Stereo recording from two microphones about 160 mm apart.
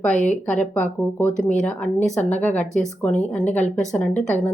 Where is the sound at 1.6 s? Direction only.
5° left (ahead or behind).